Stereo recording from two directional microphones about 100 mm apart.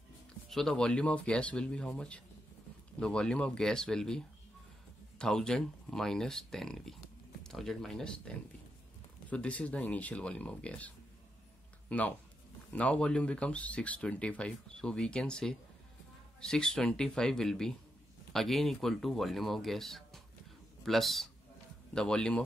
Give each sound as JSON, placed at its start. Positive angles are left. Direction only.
{"t": 0.5, "sound": "speech", "side_deg": 5}
{"t": 5.2, "sound": "speech", "side_deg": 5}
{"t": 9.3, "sound": "speech", "side_deg": 10}
{"t": 11.9, "sound": "speech", "side_deg": 15}